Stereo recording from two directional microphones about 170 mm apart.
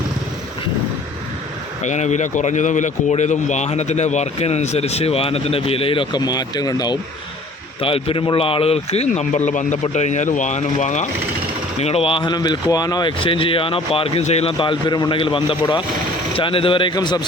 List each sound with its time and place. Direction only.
1.8 s speech: 45° left (ahead or behind); by 7.0 s 25° left (ahead or behind)
7.8 s a man's voice: 35° left (ahead or behind)